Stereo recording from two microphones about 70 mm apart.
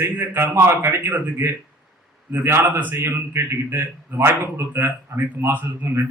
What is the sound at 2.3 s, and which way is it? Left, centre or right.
Speech, right.